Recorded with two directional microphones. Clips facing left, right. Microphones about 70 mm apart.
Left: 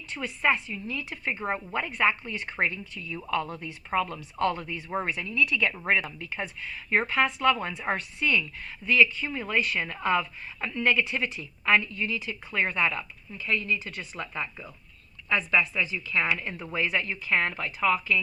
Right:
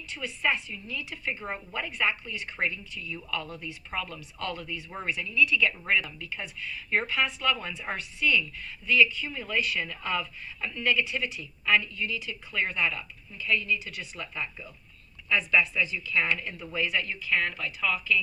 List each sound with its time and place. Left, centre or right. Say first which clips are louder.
0.1 s speech: left 3 dB; left